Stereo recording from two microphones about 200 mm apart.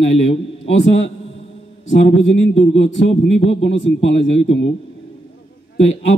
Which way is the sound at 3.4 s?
65° left (ahead or behind).